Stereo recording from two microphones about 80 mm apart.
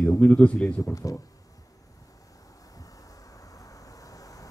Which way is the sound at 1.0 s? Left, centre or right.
Left.